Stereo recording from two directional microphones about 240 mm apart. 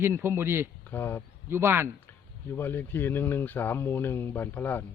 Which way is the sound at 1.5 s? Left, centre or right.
Centre.